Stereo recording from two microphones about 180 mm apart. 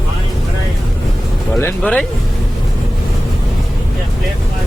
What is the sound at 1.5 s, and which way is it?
Speech, 5° left (ahead or behind).